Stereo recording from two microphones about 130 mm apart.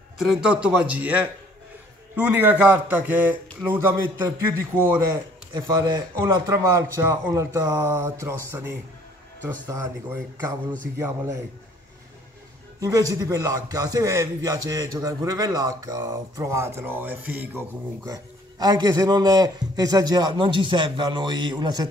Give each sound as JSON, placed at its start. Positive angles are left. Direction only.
{"t": 0.2, "sound": "a man's voice", "side_deg": -5}
{"t": 11.0, "sound": "a man's voice", "side_deg": -20}
{"t": 12.8, "sound": "a man's voice", "side_deg": -25}